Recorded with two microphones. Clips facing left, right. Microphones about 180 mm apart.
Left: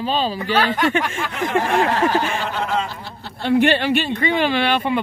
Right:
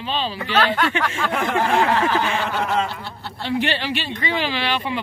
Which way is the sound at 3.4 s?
55° left (ahead or behind).